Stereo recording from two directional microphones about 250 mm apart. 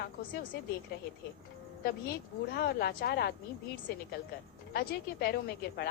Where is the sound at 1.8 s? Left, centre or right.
Left.